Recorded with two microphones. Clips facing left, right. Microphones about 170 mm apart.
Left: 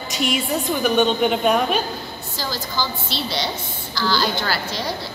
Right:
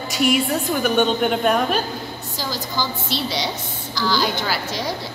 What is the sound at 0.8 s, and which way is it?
Speech, centre (ahead or behind).